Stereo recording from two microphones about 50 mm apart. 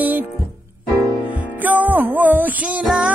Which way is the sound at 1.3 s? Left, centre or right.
Right.